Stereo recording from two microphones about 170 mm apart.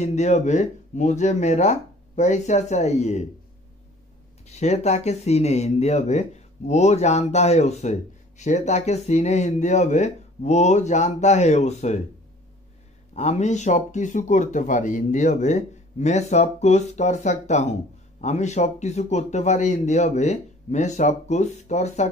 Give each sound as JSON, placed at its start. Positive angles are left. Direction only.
{"t": 0.0, "sound": "speech", "side_deg": 45}
{"t": 4.5, "sound": "speech", "side_deg": 40}
{"t": 13.1, "sound": "speech", "side_deg": 40}